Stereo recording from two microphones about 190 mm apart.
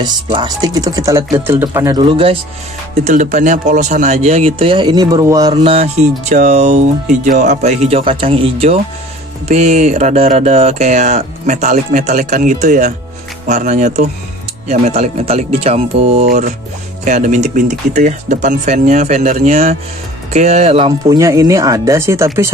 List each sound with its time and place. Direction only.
0.0 s speech: 25° right (ahead or behind)
21.2 s speech: 15° right (ahead or behind)